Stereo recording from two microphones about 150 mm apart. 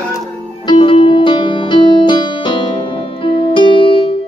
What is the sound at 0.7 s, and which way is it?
Music, 35° left (ahead or behind).